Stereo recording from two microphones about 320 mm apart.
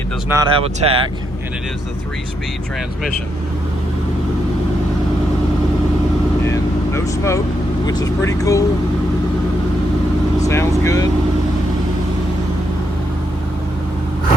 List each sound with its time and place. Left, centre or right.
0.3 s speech: centre
6.4 s vehicle: centre
7.9 s speech: centre
10.4 s speech: centre